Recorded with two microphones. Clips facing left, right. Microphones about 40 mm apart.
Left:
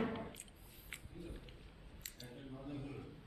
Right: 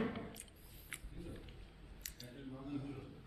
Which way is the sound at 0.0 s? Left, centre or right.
Centre.